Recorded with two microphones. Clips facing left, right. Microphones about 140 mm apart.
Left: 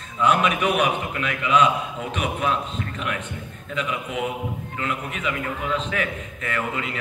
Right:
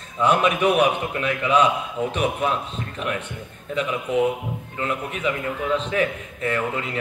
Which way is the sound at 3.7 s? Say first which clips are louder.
Right 5 dB; 35° right (ahead or behind).